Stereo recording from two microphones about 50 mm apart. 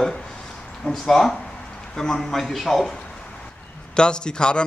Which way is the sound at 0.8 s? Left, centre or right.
Centre.